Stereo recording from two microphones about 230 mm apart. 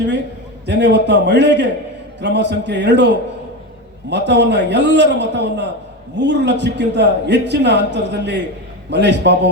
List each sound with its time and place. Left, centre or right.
0.6 s a man's voice: right